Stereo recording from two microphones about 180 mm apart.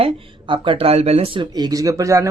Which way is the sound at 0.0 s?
25° right (ahead or behind).